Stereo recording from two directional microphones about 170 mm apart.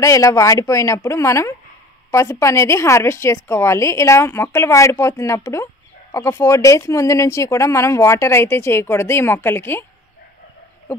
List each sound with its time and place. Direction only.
0.0 s speech: 20° left (ahead or behind)